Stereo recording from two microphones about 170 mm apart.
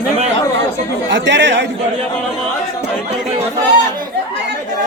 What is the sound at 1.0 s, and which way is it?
Speech, 90° right.